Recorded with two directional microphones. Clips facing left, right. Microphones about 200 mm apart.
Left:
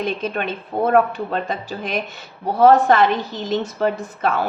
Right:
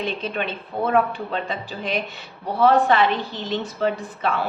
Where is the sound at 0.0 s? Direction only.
45° left (ahead or behind).